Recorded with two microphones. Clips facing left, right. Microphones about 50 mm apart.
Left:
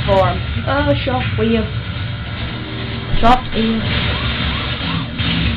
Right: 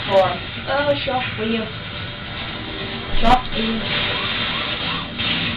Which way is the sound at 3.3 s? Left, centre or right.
Centre.